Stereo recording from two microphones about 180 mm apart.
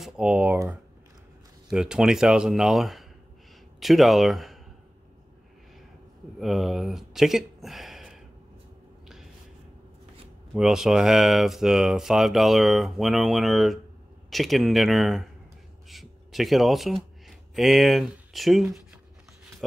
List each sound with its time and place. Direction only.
0.0 s speech: 5° right (ahead or behind)
6.4 s speech: centre (ahead or behind)
10.5 s speech: centre (ahead or behind)